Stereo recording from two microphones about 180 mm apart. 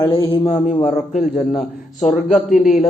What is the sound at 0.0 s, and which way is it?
A man's voice, 30° left (ahead or behind).